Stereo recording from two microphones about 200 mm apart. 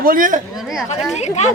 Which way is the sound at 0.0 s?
45° right (ahead or behind).